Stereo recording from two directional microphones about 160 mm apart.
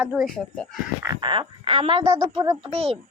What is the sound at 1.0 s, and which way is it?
Speech, 25° right (ahead or behind).